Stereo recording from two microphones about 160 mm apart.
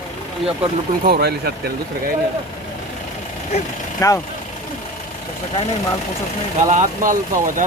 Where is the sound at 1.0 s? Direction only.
80° right.